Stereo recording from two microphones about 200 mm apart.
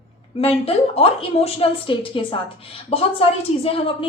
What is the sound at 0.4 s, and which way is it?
A woman's voice, 30° left (ahead or behind).